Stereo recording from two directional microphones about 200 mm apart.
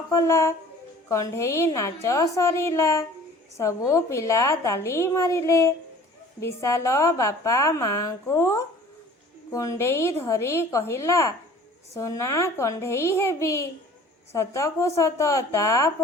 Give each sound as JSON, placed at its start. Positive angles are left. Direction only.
{"t": 0.1, "sound": "a woman's voice", "side_deg": 15}